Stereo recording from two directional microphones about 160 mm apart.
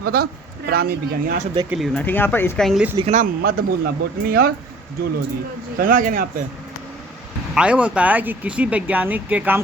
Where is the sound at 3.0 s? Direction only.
45° right (ahead or behind).